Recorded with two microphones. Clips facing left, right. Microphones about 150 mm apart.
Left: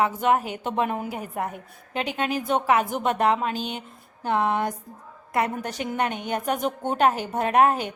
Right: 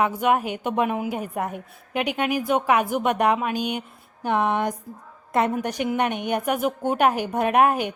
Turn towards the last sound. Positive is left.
turn(degrees=-15)  # may be behind; listen again after turning